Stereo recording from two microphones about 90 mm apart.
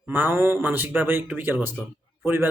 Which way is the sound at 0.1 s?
25° right (ahead or behind).